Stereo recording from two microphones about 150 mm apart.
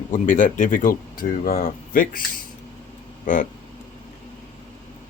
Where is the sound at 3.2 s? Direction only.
60° left (ahead or behind).